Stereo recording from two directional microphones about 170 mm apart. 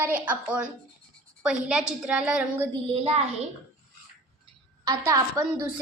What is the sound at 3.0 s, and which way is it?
Speech, 35° right (ahead or behind).